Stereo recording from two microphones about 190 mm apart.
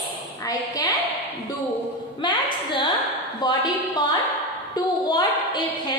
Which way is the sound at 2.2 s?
25° left (ahead or behind).